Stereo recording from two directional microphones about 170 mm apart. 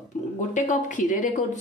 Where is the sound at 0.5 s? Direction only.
45° left (ahead or behind).